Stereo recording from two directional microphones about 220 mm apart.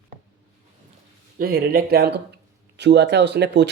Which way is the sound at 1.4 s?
40° right (ahead or behind).